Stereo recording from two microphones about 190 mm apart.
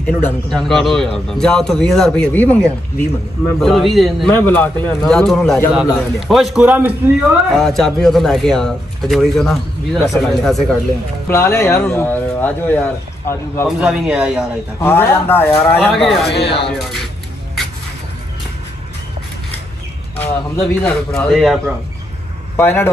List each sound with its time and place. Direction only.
0.0 s speech: 5° left (ahead or behind)
11.2 s speech: 10° left (ahead or behind)
13.7 s speech: 5° right (ahead or behind)
14.8 s speech: 10° left (ahead or behind)
15.9 s speech: centre (ahead or behind)
16.3 s speech: 30° left (ahead or behind)
20.2 s speech: 5° left (ahead or behind)
22.6 s speech: 10° left (ahead or behind)